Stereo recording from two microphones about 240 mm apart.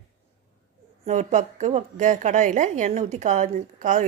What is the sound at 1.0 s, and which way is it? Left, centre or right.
A woman's voice, right.